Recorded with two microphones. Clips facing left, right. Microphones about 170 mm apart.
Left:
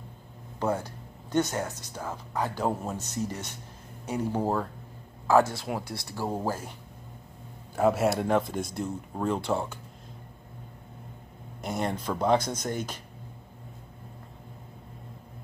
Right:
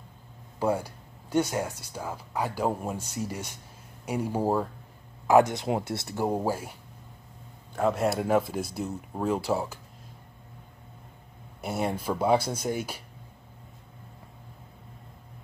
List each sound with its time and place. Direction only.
0.6 s speech: 10° right (ahead or behind)
7.7 s speech: 5° left (ahead or behind)
11.6 s speech: 10° right (ahead or behind)